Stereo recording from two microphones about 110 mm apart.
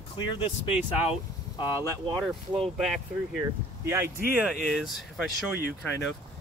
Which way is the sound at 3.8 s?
25° right (ahead or behind).